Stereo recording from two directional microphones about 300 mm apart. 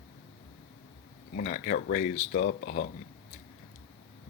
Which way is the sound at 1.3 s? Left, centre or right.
Left.